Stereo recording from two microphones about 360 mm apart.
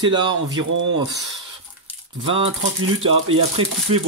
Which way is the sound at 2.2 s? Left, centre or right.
Centre.